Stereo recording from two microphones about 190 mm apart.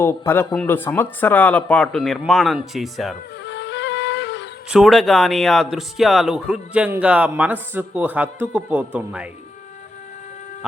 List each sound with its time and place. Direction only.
0.0 s speech: 10° left (ahead or behind)
3.4 s music: 70° left (ahead or behind)
4.7 s speech: centre (ahead or behind)